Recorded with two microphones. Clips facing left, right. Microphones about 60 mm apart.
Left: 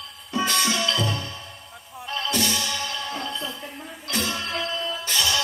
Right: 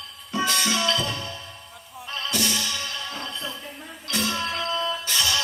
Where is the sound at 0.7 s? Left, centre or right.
Right.